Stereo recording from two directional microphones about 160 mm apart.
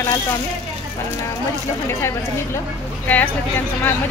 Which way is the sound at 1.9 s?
15° left (ahead or behind).